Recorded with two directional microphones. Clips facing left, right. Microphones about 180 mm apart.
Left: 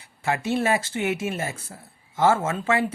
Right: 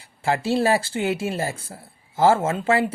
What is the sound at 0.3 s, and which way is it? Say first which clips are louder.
Speech: right 3 dB; 30° right (ahead or behind).